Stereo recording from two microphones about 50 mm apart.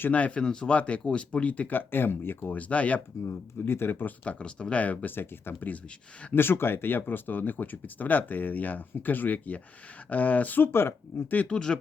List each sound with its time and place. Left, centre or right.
0.1 s speech: left
1.7 s speech: left
3.2 s speech: left
4.2 s speech: left
10.6 s speech: left
11.4 s speech: centre